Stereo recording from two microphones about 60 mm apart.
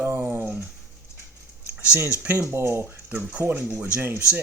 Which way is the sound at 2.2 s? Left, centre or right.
Right.